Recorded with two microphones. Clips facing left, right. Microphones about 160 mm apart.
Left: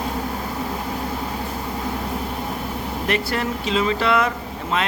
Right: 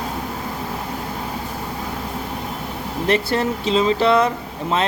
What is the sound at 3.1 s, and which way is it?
Speech, 30° right (ahead or behind).